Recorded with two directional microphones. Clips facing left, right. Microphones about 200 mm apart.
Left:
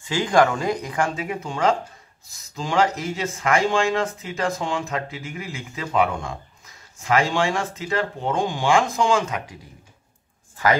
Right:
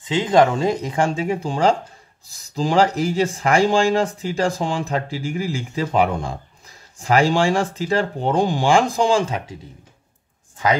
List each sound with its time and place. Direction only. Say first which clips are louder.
0.0 s speech: right 3 dB; 20° right (ahead or behind)